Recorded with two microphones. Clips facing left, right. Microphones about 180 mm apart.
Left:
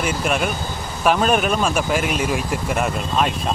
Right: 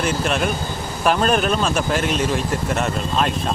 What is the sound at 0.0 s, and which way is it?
Speech, 5° left (ahead or behind).